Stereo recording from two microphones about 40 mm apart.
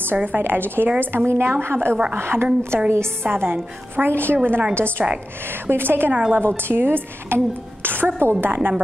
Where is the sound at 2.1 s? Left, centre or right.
Right.